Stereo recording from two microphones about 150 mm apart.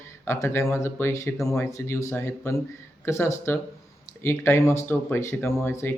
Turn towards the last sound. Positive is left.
turn(degrees=15)  # may be behind; listen again after turning